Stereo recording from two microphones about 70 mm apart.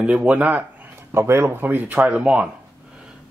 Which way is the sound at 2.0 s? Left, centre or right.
Centre.